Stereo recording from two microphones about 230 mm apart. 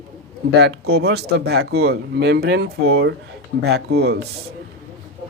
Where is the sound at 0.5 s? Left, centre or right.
Right.